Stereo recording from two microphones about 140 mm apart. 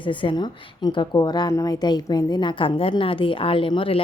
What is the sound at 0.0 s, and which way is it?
A woman's voice, 35° left (ahead or behind).